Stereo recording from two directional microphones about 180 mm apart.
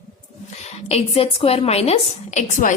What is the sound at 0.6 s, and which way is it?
A woman's voice, 35° left (ahead or behind).